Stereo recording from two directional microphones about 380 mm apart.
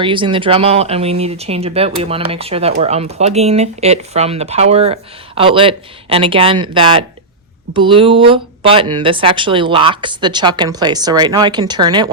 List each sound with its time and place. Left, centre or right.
0.0 s speech: centre